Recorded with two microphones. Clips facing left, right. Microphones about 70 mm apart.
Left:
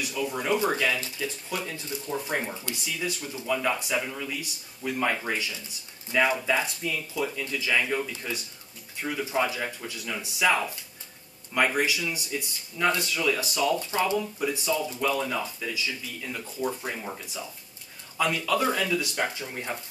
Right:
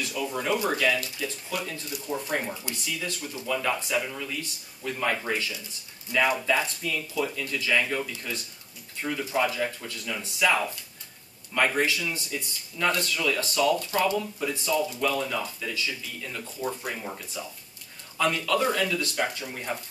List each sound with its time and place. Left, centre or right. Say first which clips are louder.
0.0 s speech: even; centre; by 2.1 s left
2.3 s speech: even; centre
13.7 s speech: right 1 dB; left